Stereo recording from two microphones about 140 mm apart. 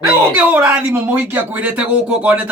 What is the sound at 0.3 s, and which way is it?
Speech, 10° right (ahead or behind).